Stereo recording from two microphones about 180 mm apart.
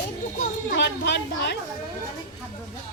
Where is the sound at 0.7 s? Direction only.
75° left (ahead or behind).